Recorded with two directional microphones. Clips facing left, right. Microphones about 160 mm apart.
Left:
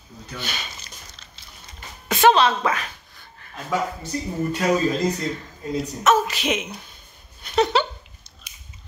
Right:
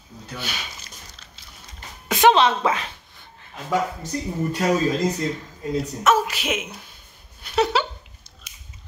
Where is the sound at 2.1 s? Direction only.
15° right (ahead or behind).